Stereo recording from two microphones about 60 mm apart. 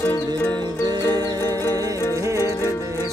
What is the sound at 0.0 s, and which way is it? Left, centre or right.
Music, left.